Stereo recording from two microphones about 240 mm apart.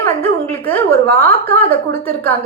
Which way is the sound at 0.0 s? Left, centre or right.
Centre.